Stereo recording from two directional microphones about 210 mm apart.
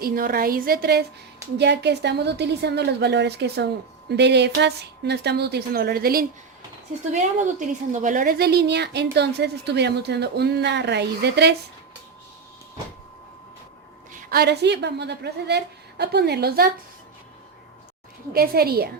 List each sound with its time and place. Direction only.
0.0 s a woman's voice: 45° right (ahead or behind)
7.1 s a woman's voice: 35° right (ahead or behind); by 11.5 s 55° right (ahead or behind)
14.1 s a woman's voice: 40° right (ahead or behind)
18.3 s a woman's voice: 45° right (ahead or behind)